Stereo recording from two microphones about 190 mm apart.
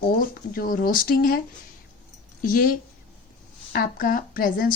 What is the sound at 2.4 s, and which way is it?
Speech, 45° left (ahead or behind).